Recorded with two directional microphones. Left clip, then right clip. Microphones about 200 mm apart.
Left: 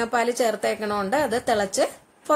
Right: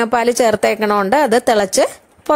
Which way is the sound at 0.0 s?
40° right (ahead or behind).